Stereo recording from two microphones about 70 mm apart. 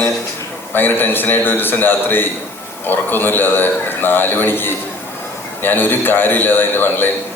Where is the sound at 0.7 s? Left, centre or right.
Left.